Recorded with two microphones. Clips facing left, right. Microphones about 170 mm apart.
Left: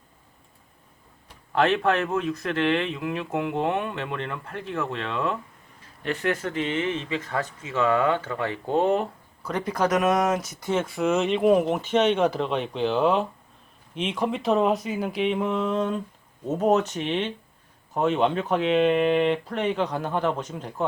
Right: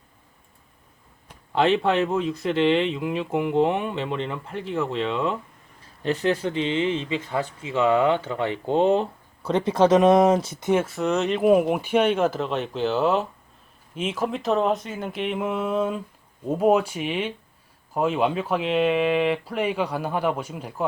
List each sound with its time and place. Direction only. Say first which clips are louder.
1.5 s speech: right 2 dB; 20° right (ahead or behind)
6.0 s speech: right 3 dB; 30° right (ahead or behind)
6.4 s speech: right 3 dB; 20° right (ahead or behind)
10.8 s speech: even; centre (ahead or behind)